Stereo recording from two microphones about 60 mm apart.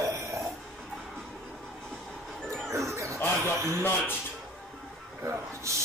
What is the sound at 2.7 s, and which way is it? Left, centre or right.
Music, right.